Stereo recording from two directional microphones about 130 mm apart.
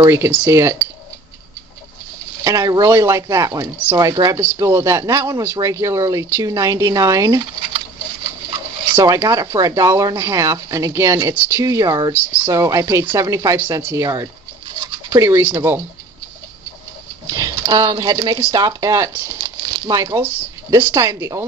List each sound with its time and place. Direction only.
0.0 s speech: 20° right (ahead or behind)
2.4 s speech: 25° right (ahead or behind)
4.4 s speech: 20° right (ahead or behind)
9.0 s speech: 25° right (ahead or behind)
12.1 s speech: 15° right (ahead or behind)
17.3 s speech: 25° right (ahead or behind)